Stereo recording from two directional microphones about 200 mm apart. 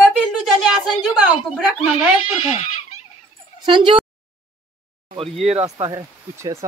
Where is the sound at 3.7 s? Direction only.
25° right (ahead or behind).